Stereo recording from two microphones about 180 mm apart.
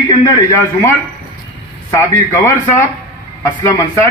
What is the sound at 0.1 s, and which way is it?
A man's voice, 15° left (ahead or behind).